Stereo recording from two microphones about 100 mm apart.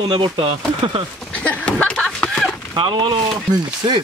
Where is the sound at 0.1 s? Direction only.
60° right (ahead or behind).